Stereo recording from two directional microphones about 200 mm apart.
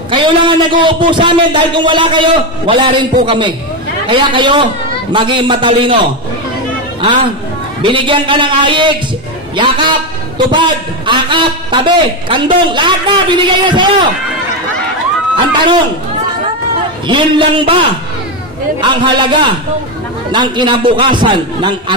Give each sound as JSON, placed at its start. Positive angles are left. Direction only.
{"t": 0.1, "sound": "a man's voice", "side_deg": -25}
{"t": 7.8, "sound": "a man's voice", "side_deg": -25}
{"t": 15.5, "sound": "a man's voice", "side_deg": -25}
{"t": 17.1, "sound": "a man's voice", "side_deg": -25}